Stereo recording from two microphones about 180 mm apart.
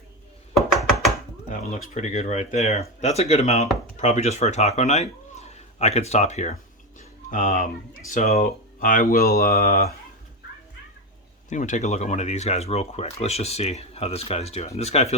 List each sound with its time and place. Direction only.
0.8 s a sound: centre (ahead or behind)
1.5 s speech: 40° left (ahead or behind)
11.4 s speech: 45° left (ahead or behind)